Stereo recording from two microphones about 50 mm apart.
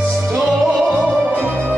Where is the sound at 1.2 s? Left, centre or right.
Right.